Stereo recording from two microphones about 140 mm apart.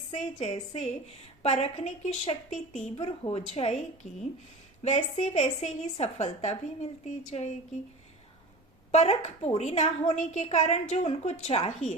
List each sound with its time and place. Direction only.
0.1 s a woman's voice: 55° left (ahead or behind)
4.8 s a woman's voice: 55° left (ahead or behind)
8.9 s a woman's voice: 50° left (ahead or behind)